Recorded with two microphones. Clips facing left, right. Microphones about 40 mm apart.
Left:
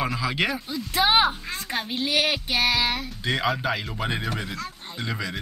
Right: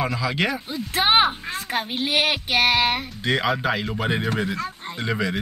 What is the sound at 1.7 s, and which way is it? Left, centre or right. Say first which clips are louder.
Speech: right 2 dB; right.